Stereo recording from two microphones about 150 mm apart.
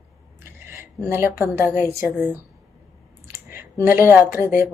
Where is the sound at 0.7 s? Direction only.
20° right (ahead or behind).